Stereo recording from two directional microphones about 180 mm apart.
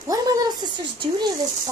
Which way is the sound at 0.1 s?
20° right (ahead or behind).